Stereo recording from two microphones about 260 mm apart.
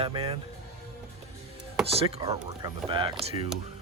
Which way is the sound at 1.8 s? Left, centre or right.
Right.